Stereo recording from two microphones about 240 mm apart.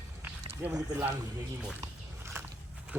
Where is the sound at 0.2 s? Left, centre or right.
Centre.